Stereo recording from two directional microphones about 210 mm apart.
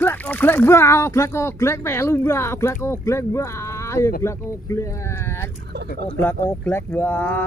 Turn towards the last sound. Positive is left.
turn(degrees=10)  # may be behind; listen again after turning